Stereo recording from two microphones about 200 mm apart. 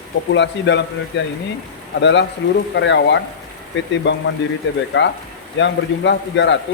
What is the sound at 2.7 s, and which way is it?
Speech, 65° left (ahead or behind).